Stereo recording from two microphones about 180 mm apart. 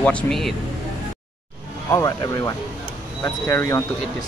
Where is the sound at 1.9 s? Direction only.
20° left (ahead or behind).